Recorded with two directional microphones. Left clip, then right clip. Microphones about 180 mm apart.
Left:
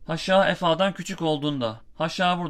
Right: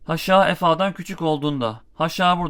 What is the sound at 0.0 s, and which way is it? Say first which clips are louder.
Speech: right 4 dB; 35° right (ahead or behind).